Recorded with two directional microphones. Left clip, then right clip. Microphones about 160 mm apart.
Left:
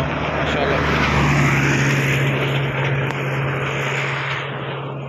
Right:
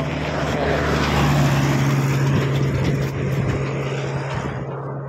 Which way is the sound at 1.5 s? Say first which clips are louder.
Left 4 dB; 55° right (ahead or behind).